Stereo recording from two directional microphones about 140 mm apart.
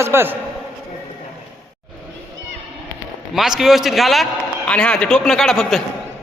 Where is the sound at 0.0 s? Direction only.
15° right (ahead or behind).